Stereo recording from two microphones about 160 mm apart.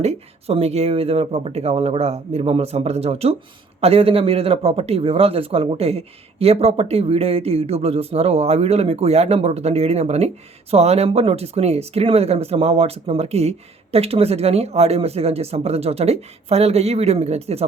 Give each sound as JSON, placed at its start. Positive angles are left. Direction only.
{"t": 0.0, "sound": "speech", "side_deg": -40}